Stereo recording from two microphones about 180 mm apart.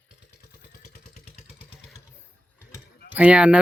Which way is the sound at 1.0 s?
35° left (ahead or behind).